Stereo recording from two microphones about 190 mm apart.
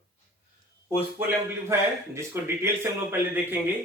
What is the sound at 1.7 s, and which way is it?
Speech, 15° right (ahead or behind).